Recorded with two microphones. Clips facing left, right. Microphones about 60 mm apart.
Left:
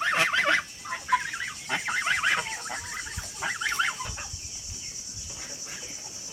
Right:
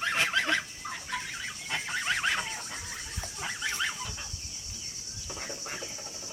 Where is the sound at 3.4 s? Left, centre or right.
Left.